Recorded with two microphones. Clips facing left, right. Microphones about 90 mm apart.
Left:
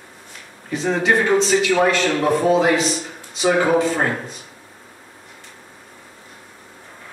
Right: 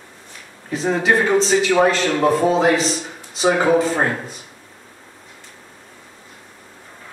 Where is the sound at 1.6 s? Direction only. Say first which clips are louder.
Right 1 dB; 30° right (ahead or behind).